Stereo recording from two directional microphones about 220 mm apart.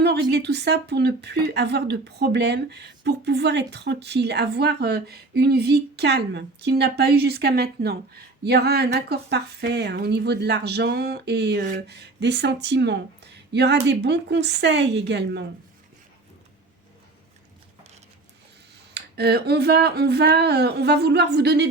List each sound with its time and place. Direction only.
0.0 s speech: 50° right (ahead or behind)
18.9 s speech: 45° right (ahead or behind)